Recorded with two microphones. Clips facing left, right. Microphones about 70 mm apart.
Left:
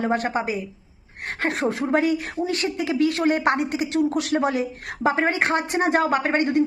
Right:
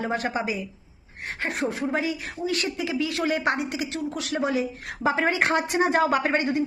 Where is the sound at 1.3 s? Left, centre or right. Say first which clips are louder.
Left 4 dB; left.